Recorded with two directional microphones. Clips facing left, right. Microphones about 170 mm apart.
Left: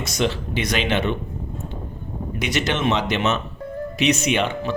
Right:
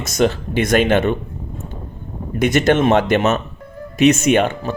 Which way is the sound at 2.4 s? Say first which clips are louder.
Right 9 dB; 50° right (ahead or behind).